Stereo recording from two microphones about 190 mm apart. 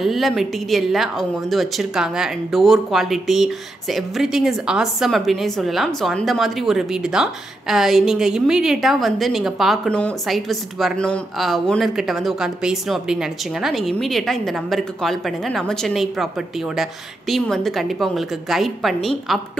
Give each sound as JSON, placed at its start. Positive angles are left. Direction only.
{"t": 0.0, "sound": "a woman's voice", "side_deg": 0}
{"t": 17.3, "sound": "a woman's voice", "side_deg": 0}